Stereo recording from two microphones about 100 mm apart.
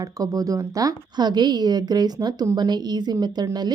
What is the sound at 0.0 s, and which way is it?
A woman's voice, 35° right (ahead or behind).